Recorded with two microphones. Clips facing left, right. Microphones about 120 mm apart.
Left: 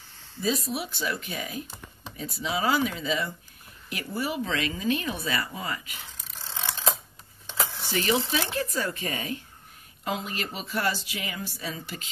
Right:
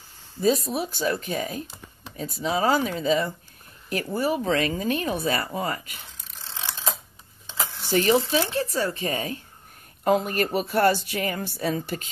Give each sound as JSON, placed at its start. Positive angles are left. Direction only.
{"t": 0.4, "sound": "a woman's voice", "side_deg": -45}
{"t": 7.9, "sound": "speech", "side_deg": -40}
{"t": 10.0, "sound": "a woman's voice", "side_deg": -50}